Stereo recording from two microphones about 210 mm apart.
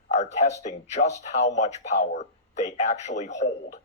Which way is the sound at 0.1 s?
35° left (ahead or behind).